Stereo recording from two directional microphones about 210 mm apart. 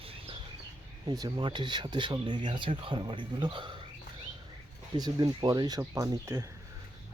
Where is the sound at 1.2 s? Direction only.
20° right (ahead or behind).